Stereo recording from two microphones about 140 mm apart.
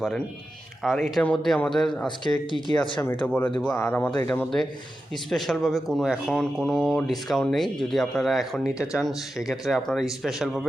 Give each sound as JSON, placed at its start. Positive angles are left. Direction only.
{"t": 0.8, "sound": "speech", "side_deg": 0}
{"t": 2.0, "sound": "speech", "side_deg": 35}
{"t": 3.2, "sound": "speech", "side_deg": 10}